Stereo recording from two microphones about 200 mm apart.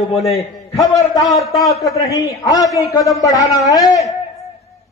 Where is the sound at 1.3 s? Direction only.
Centre (ahead or behind).